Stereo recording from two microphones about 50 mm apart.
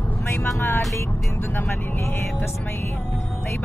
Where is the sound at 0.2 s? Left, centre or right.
Left.